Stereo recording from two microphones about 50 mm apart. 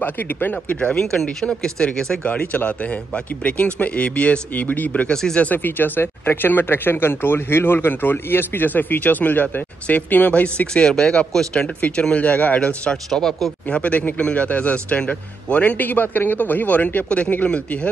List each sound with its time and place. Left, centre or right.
0.0 s speech: left
0.7 s speech: centre
2.2 s a man's voice: left
5.0 s speech: centre
5.4 s speech: left
10.7 s speech: centre
12.0 s a man's voice: left
13.1 s speech: centre
13.7 s a man's voice: left